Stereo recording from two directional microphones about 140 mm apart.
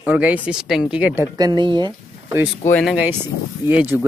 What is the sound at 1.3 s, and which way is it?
Speech, 30° right (ahead or behind).